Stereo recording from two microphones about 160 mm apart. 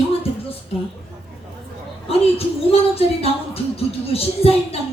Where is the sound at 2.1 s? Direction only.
40° left (ahead or behind).